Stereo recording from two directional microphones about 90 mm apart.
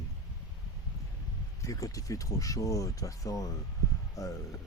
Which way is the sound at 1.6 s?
40° left (ahead or behind).